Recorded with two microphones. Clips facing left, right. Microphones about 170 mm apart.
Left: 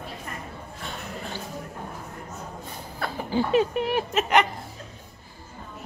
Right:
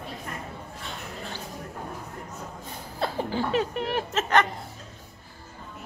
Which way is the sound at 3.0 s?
25° right (ahead or behind).